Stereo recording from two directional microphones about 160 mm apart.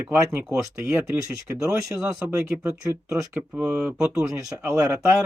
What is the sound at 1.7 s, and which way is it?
Speech, 5° right (ahead or behind).